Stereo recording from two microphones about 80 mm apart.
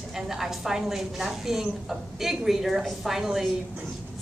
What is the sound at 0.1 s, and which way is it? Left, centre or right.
A woman's voice, centre.